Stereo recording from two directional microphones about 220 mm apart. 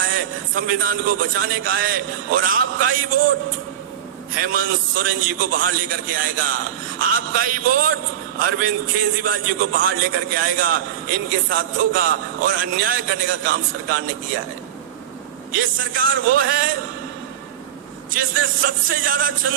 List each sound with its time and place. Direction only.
0.0 s a man's voice: 40° right (ahead or behind)
4.4 s a man's voice: 40° right (ahead or behind)
7.3 s a man's voice: 40° right (ahead or behind)
15.5 s a man's voice: 40° right (ahead or behind)
18.1 s a man's voice: 40° right (ahead or behind)